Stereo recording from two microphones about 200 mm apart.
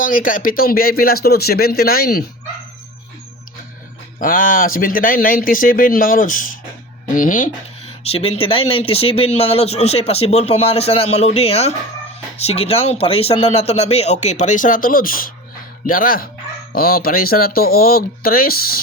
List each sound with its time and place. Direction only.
0.0 s speech: 45° left (ahead or behind)
4.2 s speech: 45° left (ahead or behind)
7.9 s speech: 30° left (ahead or behind); by 18.8 s 50° left (ahead or behind)